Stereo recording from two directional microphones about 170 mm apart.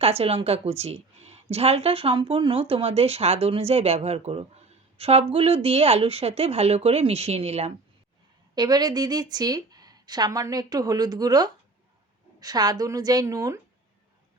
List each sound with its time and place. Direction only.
0.0 s a woman's voice: 35° right (ahead or behind)
8.5 s a woman's voice: 25° right (ahead or behind)